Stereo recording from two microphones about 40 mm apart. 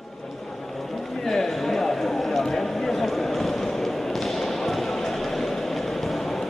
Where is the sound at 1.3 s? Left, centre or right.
Centre.